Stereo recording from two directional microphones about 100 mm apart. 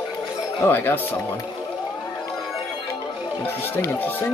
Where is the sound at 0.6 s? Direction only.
20° left (ahead or behind).